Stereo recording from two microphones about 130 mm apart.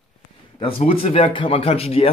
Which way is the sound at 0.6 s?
45° left (ahead or behind).